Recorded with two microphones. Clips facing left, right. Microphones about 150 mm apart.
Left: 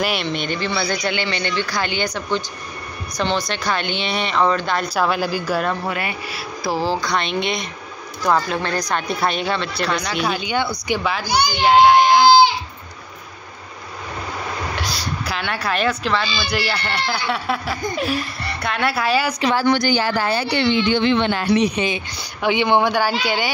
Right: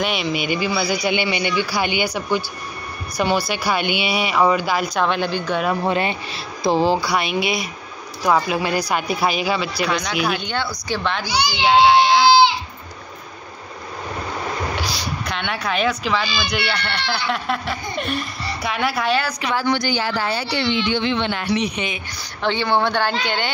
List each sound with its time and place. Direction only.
0.0 s speech: centre (ahead or behind)
4.9 s speech: 5° left (ahead or behind)
5.9 s speech: 25° right (ahead or behind)
7.1 s speech: 5° right (ahead or behind)
11.2 s speech: 50° left (ahead or behind)
12.0 s goat: 45° left (ahead or behind)
14.8 s speech: centre (ahead or behind)
20.0 s speech: 50° left (ahead or behind); by 22.0 s 35° left (ahead or behind)
22.4 s speech: 15° left (ahead or behind)